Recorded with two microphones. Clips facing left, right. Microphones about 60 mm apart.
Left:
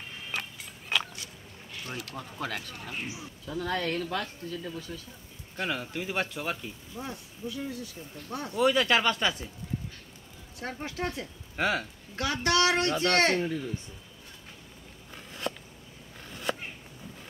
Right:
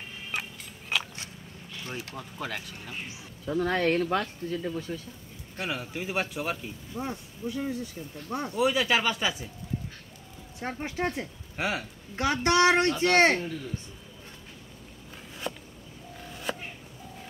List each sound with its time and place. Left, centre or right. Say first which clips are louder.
0.3 s a sound: right 1 dB; centre
1.9 s speech: right 1 dB; right
2.1 s speech: left 3 dB; centre
3.5 s speech: right 5 dB; right
5.6 s speech: left 1 dB; centre
7.0 s speech: right 4 dB; right
8.5 s speech: left 1 dB; centre
10.6 s speech: right 3 dB; right
11.5 s speech: left 2 dB; centre
12.2 s speech: right 3 dB; right
15.5 s a sound: left 1 dB; centre